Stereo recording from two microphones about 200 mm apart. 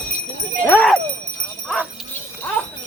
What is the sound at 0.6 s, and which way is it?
Speech, 10° left (ahead or behind).